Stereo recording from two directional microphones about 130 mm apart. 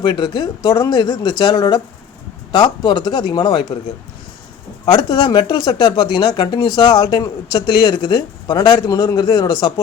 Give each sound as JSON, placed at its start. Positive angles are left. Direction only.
{"t": 0.0, "sound": "speech", "side_deg": 35}
{"t": 4.9, "sound": "speech", "side_deg": 35}